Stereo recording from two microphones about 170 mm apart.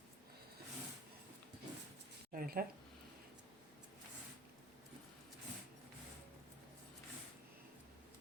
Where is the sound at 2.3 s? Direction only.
60° right (ahead or behind).